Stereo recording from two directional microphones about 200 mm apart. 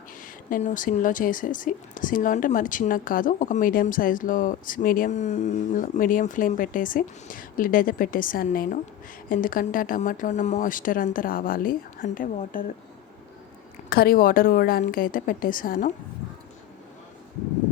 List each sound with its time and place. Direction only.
0.5 s speech: 40° left (ahead or behind)
13.9 s speech: 50° left (ahead or behind)